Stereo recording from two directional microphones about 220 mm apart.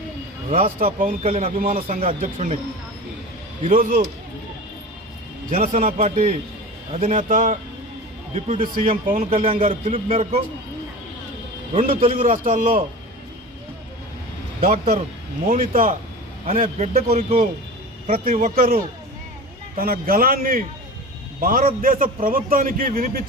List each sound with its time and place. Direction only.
0.5 s a man's voice: 40° right (ahead or behind)
1.2 s speech: 25° right (ahead or behind)
1.5 s a man's voice: 40° right (ahead or behind)
3.6 s a man's voice: 35° right (ahead or behind)
5.5 s a man's voice: 30° right (ahead or behind)
9.8 s speech: 25° right (ahead or behind)
11.7 s a man's voice: 30° right (ahead or behind)
14.6 s a man's voice: 40° right (ahead or behind)